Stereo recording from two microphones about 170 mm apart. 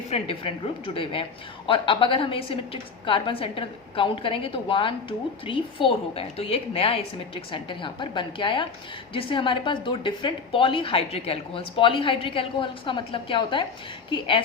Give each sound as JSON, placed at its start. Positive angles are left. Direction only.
{"t": 0.1, "sound": "a woman's voice", "side_deg": 35}